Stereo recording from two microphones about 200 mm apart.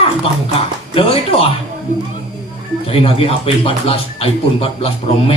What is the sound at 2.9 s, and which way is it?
Speech, 30° left (ahead or behind).